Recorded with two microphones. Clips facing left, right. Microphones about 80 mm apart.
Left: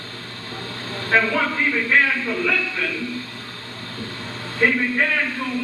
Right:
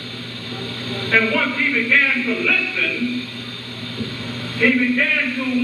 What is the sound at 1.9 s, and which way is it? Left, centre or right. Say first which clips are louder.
Speech: left 1 dB; left.